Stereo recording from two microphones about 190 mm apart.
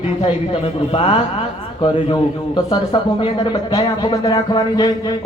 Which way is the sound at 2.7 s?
25° left (ahead or behind).